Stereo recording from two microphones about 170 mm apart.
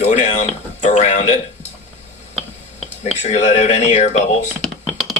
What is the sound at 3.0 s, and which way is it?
Speech, 40° left (ahead or behind).